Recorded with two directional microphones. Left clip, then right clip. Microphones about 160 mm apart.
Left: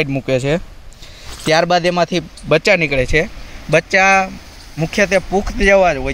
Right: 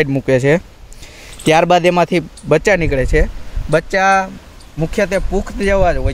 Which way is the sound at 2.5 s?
30° right (ahead or behind).